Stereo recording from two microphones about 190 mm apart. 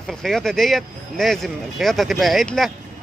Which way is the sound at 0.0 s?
5° left (ahead or behind).